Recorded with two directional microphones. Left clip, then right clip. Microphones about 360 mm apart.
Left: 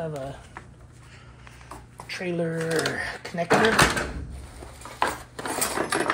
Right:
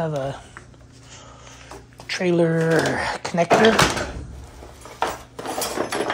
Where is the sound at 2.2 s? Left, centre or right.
Right.